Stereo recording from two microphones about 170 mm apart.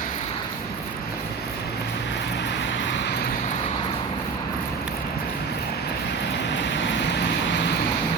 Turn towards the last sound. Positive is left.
turn(degrees=90)